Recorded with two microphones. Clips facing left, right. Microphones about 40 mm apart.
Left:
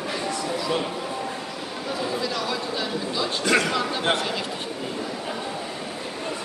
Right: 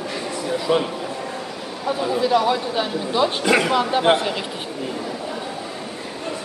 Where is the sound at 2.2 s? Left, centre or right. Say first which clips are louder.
Right 9 dB; right.